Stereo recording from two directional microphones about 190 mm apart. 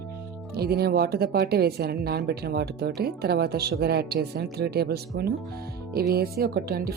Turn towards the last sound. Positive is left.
turn(degrees=-50)  # may be behind; listen again after turning